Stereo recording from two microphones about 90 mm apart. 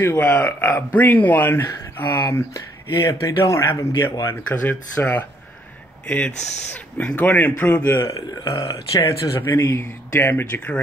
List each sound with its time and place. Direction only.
0.0 s speech: 20° left (ahead or behind); by 4.4 s 35° left (ahead or behind)
4.5 s speech: 15° left (ahead or behind)
8.0 s speech: 40° left (ahead or behind)
10.3 s speech: 15° left (ahead or behind)